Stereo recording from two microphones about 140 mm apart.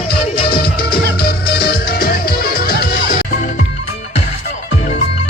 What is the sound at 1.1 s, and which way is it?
Music, 90° left.